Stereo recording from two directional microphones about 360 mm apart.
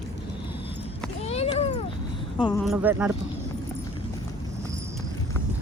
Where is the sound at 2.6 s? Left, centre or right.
Centre.